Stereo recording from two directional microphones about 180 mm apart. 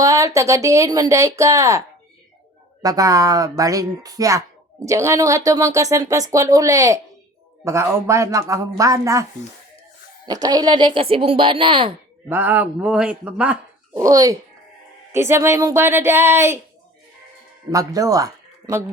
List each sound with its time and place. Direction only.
0.0 s speech: 20° right (ahead or behind)
2.8 s speech: 20° right (ahead or behind)
10.2 s speech: 20° right (ahead or behind)
12.3 s speech: 10° right (ahead or behind)
14.0 s speech: 20° right (ahead or behind)
17.7 s a man's voice: 20° right (ahead or behind)